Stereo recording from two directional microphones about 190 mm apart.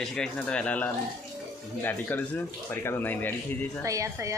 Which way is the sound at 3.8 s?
15° right (ahead or behind).